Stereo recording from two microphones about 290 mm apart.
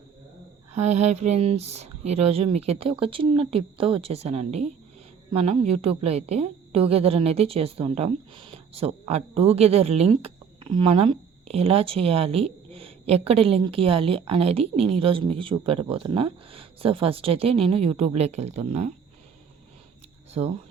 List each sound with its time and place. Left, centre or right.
0.8 s a woman's voice: right
20.3 s speech: right